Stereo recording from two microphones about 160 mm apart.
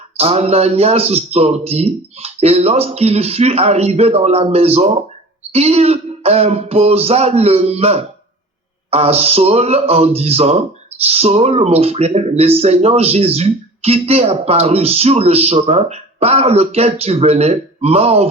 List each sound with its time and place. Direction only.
0.2 s speech: 40° right (ahead or behind)